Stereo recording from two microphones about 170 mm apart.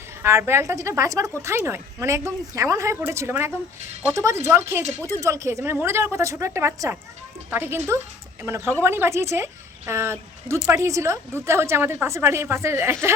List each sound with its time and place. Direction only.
0.2 s speech: 15° right (ahead or behind)